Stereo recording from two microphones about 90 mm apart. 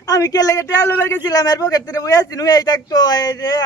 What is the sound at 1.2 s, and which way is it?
Speech, 45° left (ahead or behind).